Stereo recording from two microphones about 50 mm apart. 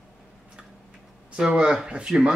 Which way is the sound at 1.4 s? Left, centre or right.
Centre.